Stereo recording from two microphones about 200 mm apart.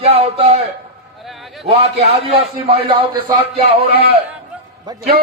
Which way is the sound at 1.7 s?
30° right (ahead or behind).